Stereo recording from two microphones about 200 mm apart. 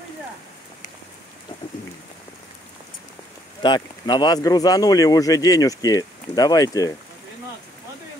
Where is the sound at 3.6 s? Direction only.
20° left (ahead or behind).